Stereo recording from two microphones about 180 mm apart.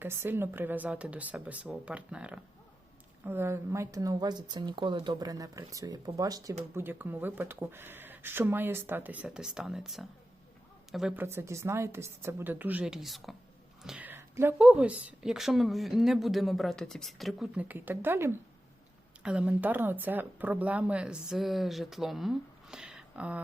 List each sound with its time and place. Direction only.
0.0 s speech: 10° right (ahead or behind)